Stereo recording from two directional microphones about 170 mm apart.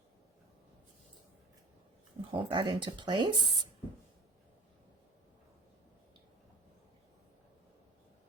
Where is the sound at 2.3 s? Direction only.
30° right (ahead or behind).